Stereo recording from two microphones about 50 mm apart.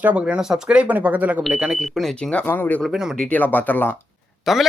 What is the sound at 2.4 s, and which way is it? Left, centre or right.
Speech, left.